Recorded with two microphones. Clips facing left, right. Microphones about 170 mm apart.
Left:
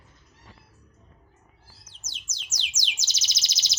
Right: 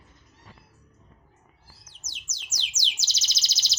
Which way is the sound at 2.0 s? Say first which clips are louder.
Left 1 dB; centre (ahead or behind).